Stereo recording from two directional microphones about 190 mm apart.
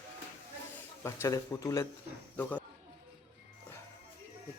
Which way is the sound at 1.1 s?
15° left (ahead or behind).